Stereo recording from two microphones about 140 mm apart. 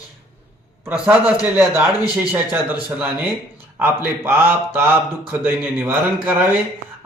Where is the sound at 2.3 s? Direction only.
15° right (ahead or behind).